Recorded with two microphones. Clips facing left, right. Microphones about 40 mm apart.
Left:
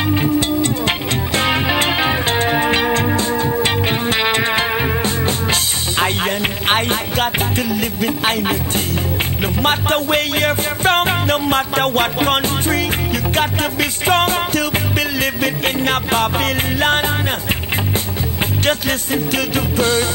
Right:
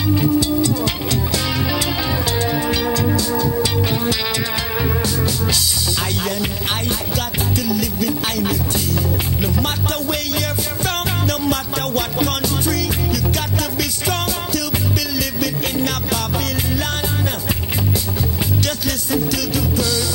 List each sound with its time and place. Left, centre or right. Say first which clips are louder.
0.0 s music: even; left